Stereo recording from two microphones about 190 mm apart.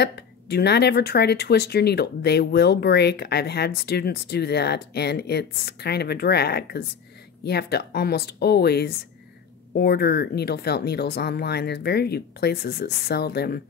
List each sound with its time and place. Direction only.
0.0 s speech: 60° left (ahead or behind)